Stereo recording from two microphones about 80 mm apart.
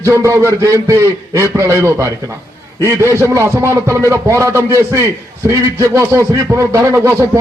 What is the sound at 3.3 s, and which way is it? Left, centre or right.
A man's voice, right.